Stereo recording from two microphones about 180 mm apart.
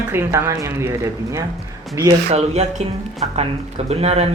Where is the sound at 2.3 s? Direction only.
35° right (ahead or behind).